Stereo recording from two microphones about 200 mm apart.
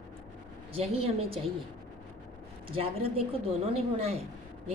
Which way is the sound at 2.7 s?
30° right (ahead or behind).